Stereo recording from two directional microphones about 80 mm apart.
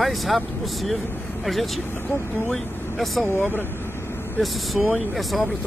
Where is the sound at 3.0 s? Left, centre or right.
Centre.